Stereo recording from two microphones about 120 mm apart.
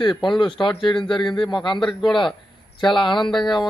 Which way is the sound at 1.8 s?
Centre (ahead or behind).